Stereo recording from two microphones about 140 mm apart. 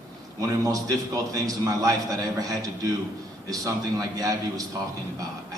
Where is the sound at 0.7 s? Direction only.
25° right (ahead or behind).